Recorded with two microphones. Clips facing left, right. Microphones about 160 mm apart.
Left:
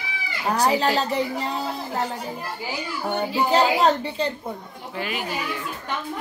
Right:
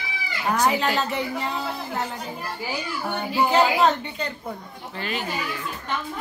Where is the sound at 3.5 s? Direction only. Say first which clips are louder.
Left 1 dB; 35° left (ahead or behind).